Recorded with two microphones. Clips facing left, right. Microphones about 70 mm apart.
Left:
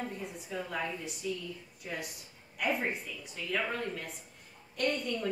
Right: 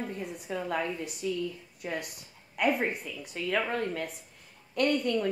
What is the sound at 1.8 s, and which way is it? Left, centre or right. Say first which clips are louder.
A woman's voice: right 5 dB; right.